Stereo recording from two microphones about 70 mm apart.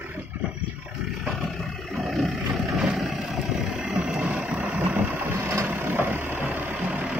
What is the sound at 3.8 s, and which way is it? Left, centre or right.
Vehicle, centre.